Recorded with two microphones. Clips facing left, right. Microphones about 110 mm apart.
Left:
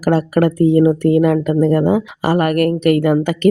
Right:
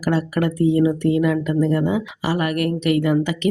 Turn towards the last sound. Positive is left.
turn(degrees=50)  # may be behind; listen again after turning